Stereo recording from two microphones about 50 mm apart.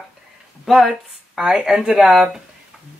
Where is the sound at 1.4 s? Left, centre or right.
Centre.